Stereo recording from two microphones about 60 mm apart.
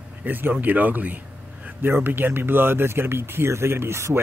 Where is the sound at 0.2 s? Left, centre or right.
Right.